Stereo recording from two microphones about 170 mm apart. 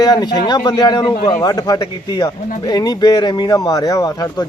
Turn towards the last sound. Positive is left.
turn(degrees=20)  # may be behind; listen again after turning